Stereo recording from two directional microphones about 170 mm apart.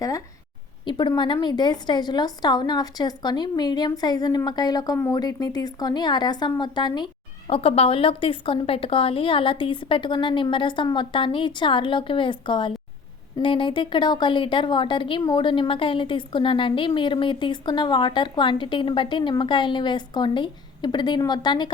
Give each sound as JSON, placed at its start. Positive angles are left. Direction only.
{"t": 0.9, "sound": "a woman's voice", "side_deg": 25}